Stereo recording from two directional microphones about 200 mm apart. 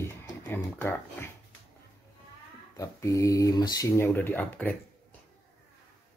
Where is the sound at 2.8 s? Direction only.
15° left (ahead or behind).